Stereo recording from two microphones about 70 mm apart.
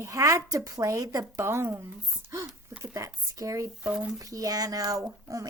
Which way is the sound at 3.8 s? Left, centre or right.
Centre.